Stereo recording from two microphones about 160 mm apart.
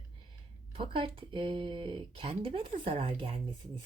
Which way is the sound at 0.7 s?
35° right (ahead or behind).